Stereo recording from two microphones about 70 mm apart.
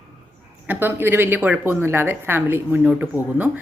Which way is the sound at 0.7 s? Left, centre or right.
Right.